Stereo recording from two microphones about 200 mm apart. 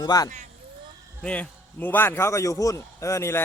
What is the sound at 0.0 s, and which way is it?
Speech, 20° left (ahead or behind).